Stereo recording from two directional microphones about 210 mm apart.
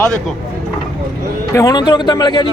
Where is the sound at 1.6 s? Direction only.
20° left (ahead or behind).